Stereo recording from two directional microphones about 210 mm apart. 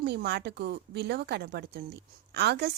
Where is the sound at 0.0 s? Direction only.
50° right (ahead or behind).